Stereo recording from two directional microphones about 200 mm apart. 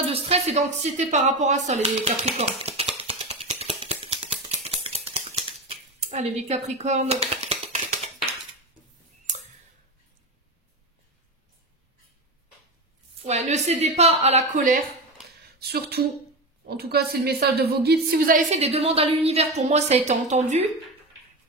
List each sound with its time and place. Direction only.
0.0 s a woman's voice: 30° right (ahead or behind)
2.6 s a sound: 30° right (ahead or behind)
4.6 s scissors: 30° right (ahead or behind)
13.5 s a woman's voice: 35° right (ahead or behind)
15.6 s a woman's voice: 50° right (ahead or behind); by 20.6 s 35° right (ahead or behind)